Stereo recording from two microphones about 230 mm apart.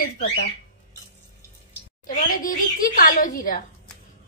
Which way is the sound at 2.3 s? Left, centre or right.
Left.